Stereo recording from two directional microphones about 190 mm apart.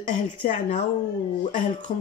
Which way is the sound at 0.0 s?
40° left (ahead or behind).